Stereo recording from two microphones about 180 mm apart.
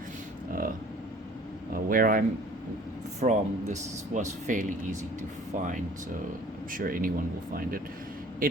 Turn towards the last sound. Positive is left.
turn(degrees=-50)  # may be behind; listen again after turning